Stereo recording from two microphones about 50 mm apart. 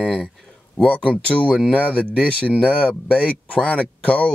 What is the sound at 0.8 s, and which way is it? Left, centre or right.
Speech, left.